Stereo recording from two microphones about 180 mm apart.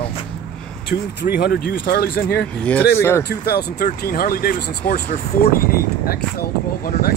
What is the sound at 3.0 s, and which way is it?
Speech, 15° left (ahead or behind).